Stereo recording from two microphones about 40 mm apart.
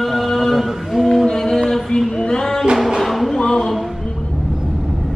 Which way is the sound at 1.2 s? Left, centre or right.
Centre.